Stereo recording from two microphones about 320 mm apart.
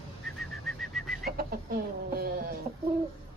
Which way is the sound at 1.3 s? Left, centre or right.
Right.